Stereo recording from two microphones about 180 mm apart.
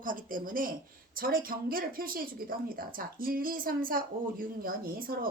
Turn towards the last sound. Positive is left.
turn(degrees=-55)  # may be behind; listen again after turning